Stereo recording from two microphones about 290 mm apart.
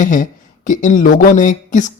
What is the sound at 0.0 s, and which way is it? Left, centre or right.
A man's voice, left.